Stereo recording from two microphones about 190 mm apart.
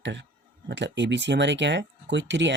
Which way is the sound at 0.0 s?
70° right (ahead or behind).